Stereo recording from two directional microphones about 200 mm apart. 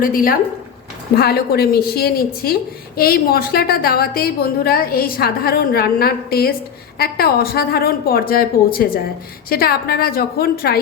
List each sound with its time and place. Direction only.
0.0 s a woman's voice: 45° left (ahead or behind)